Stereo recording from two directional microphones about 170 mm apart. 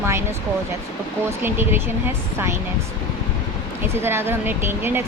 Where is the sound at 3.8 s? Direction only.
15° right (ahead or behind).